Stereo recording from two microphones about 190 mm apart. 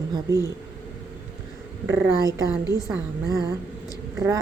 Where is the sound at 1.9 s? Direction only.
10° right (ahead or behind).